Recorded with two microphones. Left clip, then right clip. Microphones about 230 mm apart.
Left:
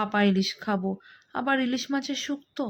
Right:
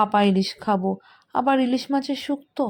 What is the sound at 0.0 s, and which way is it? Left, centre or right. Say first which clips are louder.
Speech: right 6 dB; centre.